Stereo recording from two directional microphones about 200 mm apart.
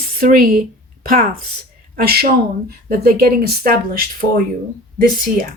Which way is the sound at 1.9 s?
50° right (ahead or behind).